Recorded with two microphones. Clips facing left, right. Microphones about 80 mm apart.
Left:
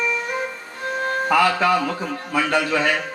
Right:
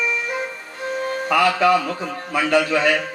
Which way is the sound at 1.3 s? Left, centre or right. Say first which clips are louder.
Right 2 dB; left.